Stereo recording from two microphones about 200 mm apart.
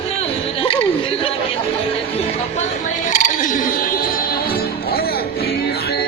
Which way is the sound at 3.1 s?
40° left (ahead or behind).